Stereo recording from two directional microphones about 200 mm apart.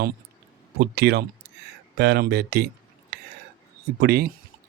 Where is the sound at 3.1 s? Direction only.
50° right (ahead or behind).